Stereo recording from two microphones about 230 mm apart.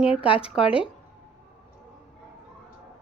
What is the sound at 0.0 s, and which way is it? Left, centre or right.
Speech, left.